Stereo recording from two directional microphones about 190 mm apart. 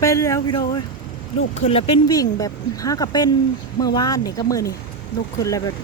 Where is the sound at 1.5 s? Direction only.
35° left (ahead or behind).